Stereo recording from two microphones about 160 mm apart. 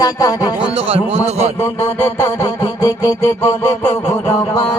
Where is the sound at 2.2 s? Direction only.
20° left (ahead or behind).